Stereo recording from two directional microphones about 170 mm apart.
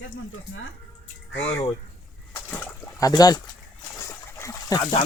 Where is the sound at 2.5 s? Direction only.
10° left (ahead or behind).